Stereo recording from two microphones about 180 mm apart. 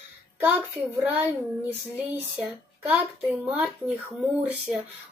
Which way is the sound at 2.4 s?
5° right (ahead or behind).